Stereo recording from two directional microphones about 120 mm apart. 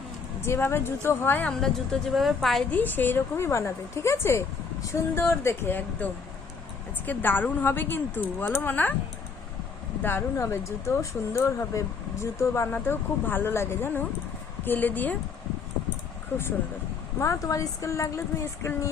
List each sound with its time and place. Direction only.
0.4 s a woman's voice: 20° left (ahead or behind); by 2.6 s centre (ahead or behind)
2.6 s a woman's voice: 15° left (ahead or behind)
10.0 s a woman's voice: 20° left (ahead or behind)
17.2 s a woman's voice: 25° left (ahead or behind)